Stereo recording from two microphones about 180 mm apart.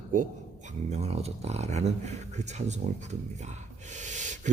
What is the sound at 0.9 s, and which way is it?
Speech, 35° right (ahead or behind).